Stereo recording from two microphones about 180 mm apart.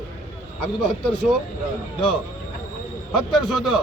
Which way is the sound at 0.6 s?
5° left (ahead or behind).